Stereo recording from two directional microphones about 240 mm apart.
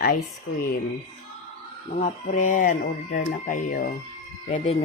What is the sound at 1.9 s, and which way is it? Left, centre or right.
Speech, left.